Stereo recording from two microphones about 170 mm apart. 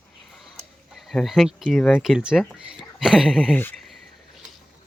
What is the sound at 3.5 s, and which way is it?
Speech, 10° left (ahead or behind).